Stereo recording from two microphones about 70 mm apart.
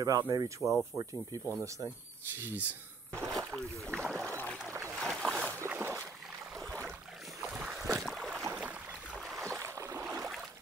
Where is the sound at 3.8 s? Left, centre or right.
Centre.